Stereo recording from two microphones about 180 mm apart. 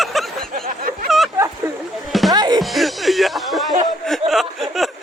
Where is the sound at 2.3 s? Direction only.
20° right (ahead or behind).